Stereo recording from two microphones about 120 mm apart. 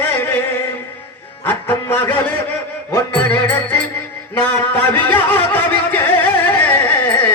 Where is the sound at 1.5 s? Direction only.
15° left (ahead or behind).